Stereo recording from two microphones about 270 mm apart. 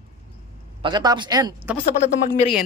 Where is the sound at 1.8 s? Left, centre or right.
Left.